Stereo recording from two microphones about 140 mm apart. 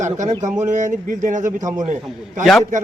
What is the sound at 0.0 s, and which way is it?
Speech, 60° right (ahead or behind).